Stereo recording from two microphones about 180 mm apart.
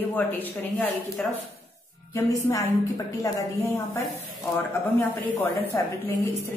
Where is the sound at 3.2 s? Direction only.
15° left (ahead or behind).